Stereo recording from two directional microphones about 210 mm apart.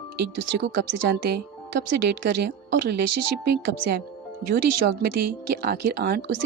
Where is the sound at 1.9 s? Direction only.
55° right (ahead or behind).